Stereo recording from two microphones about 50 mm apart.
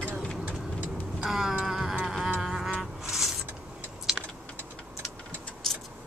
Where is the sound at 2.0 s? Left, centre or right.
Centre.